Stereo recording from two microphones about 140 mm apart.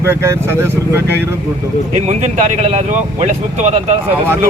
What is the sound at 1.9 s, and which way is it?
Speech, 55° right (ahead or behind).